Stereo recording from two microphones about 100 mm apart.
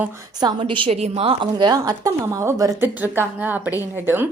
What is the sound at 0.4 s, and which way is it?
Speech, 50° right (ahead or behind).